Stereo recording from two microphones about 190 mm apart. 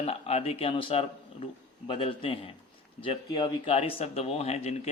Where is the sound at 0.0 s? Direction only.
30° left (ahead or behind).